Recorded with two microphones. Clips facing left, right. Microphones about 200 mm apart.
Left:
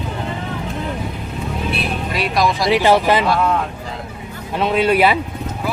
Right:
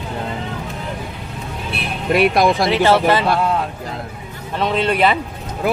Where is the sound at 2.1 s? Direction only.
55° right (ahead or behind).